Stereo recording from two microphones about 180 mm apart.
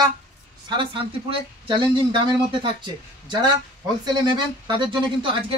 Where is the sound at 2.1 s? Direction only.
25° right (ahead or behind).